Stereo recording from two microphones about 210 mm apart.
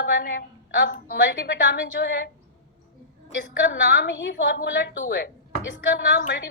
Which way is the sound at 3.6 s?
55° left (ahead or behind).